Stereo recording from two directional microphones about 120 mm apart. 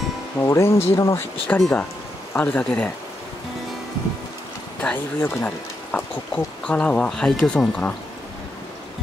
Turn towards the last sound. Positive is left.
turn(degrees=5)  # may be behind; listen again after turning